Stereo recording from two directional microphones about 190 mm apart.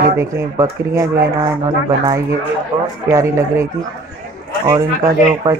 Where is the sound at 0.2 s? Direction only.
15° right (ahead or behind).